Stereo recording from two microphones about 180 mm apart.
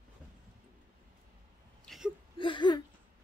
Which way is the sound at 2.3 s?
25° left (ahead or behind).